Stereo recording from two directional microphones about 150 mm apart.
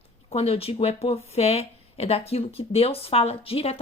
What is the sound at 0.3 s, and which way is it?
Speech, 40° left (ahead or behind).